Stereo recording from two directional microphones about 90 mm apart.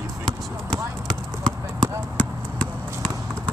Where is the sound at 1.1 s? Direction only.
10° left (ahead or behind).